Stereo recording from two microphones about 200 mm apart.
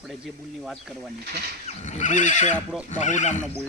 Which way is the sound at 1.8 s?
35° left (ahead or behind).